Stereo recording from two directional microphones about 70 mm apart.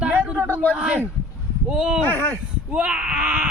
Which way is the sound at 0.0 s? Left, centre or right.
Right.